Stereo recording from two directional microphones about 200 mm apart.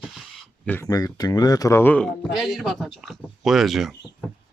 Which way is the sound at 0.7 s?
15° left (ahead or behind).